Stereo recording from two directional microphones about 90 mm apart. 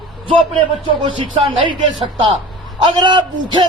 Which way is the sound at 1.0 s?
70° right (ahead or behind).